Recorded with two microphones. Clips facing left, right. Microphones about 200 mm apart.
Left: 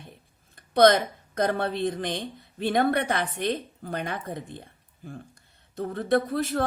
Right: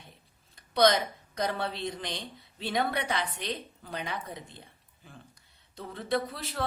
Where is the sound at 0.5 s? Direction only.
50° left (ahead or behind).